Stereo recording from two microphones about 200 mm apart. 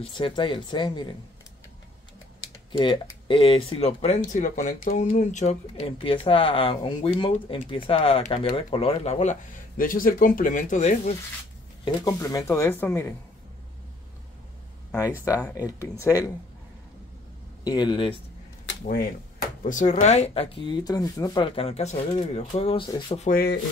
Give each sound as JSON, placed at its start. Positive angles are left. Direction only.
{"t": 0.1, "sound": "speech", "side_deg": 25}
{"t": 2.7, "sound": "speech", "side_deg": 25}
{"t": 11.8, "sound": "speech", "side_deg": 15}
{"t": 15.0, "sound": "speech", "side_deg": 15}
{"t": 17.6, "sound": "speech", "side_deg": 20}
{"t": 19.6, "sound": "speech", "side_deg": 40}
{"t": 23.2, "sound": "speech", "side_deg": 50}